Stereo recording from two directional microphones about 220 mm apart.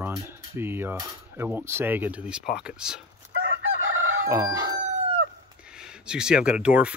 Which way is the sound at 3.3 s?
65° right (ahead or behind).